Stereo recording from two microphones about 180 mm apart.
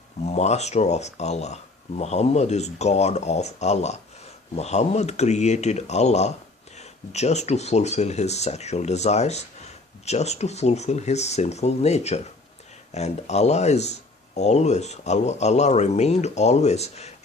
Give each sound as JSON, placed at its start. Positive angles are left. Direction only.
{"t": 0.3, "sound": "speech", "side_deg": 40}